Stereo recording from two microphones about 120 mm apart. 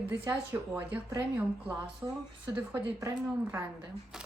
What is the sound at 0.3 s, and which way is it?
Speech, 20° right (ahead or behind).